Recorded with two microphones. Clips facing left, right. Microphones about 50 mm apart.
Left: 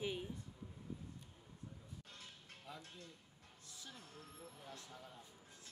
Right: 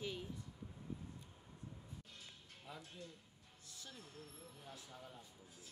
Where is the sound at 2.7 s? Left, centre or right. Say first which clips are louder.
Even; centre.